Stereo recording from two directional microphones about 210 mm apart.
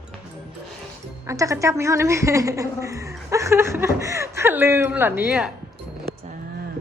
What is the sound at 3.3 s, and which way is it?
Chuckle, 15° right (ahead or behind).